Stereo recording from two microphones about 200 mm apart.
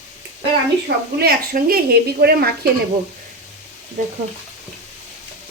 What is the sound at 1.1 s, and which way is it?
A woman's voice, 50° right (ahead or behind).